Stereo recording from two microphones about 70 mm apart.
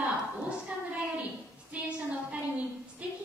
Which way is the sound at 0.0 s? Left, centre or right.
Centre.